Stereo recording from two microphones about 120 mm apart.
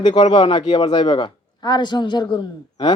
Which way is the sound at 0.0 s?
40° left (ahead or behind).